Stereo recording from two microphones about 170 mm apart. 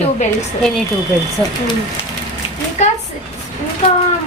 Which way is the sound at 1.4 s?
5° left (ahead or behind).